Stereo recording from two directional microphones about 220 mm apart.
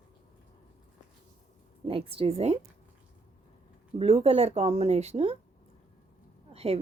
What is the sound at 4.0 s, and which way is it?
A woman's voice, 25° right (ahead or behind).